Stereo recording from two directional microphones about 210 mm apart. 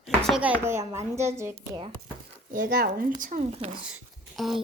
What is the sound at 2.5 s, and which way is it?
Speech, 40° right (ahead or behind).